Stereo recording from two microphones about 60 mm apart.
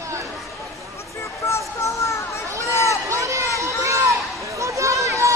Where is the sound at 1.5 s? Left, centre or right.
Left.